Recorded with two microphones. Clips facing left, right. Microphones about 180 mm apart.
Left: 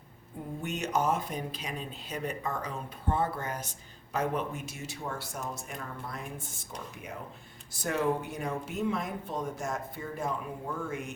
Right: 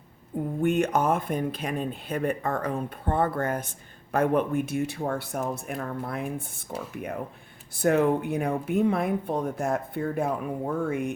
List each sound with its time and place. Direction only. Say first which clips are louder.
0.6 s speech: right 7 dB; 55° right (ahead or behind)